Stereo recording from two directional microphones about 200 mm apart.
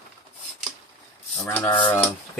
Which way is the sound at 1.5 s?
10° left (ahead or behind).